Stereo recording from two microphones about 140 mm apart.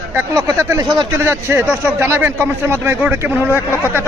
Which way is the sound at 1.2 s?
15° right (ahead or behind).